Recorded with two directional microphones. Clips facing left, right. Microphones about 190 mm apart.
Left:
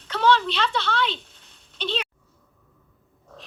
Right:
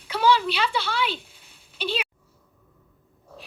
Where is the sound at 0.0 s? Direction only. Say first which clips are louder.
Even; 10° right (ahead or behind).